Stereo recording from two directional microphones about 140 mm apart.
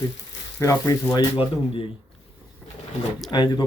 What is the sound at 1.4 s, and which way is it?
Speech, 40° left (ahead or behind).